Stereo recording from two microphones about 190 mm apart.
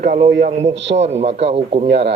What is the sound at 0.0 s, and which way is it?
Speech, 40° right (ahead or behind).